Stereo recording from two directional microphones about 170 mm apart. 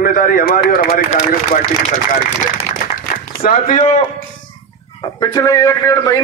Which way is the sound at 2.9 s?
55° left (ahead or behind).